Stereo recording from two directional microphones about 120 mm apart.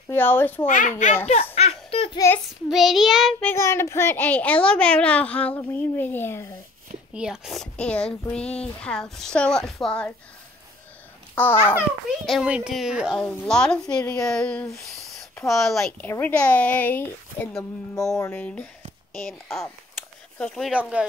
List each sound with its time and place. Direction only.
0.1 s a child's voice: 20° left (ahead or behind)
0.7 s a child's voice: 90° left; by 2.0 s 60° left (ahead or behind)
2.7 s child singing: centre (ahead or behind)
3.4 s a child's voice: 20° left (ahead or behind)
7.2 s a child's voice: 5° right (ahead or behind)
11.4 s a child's voice: 15° left (ahead or behind)
12.3 s child singing: 5° right (ahead or behind)
13.2 s a child's voice: 10° left (ahead or behind)
14.8 s a sound: centre (ahead or behind)
15.4 s child singing: centre (ahead or behind)
16.0 s a child's voice: 15° left (ahead or behind)
17.9 s speech: 25° left (ahead or behind)
18.3 s a child's voice: 10° left (ahead or behind)
19.1 s child singing: 5° left (ahead or behind)